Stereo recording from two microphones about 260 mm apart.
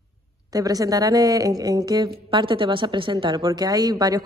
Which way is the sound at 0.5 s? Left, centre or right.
Centre.